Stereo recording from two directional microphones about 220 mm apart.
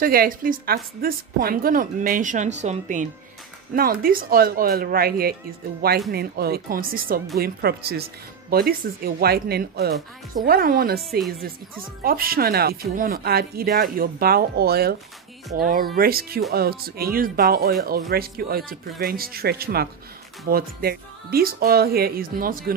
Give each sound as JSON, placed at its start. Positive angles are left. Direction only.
{"t": 0.0, "sound": "a woman's voice", "side_deg": -40}